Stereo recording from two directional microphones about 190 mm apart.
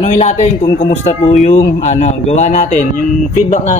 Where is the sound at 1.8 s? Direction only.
40° left (ahead or behind).